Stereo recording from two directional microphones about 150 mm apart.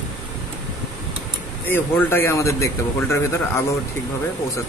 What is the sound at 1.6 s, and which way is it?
Speech, 10° left (ahead or behind).